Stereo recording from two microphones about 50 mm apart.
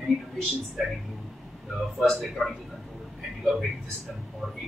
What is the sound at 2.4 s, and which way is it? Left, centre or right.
Speech, centre.